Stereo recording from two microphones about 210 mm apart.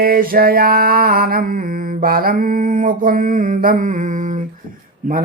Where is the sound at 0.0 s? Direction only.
45° right (ahead or behind).